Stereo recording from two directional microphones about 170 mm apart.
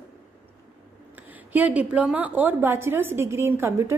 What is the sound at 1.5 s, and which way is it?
A woman's voice, 10° right (ahead or behind).